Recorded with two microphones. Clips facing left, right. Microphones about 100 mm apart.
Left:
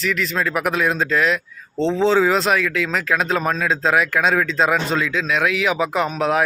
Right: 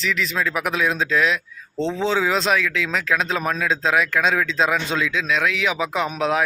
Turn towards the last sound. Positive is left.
turn(degrees=0)  # may be behind; listen again after turning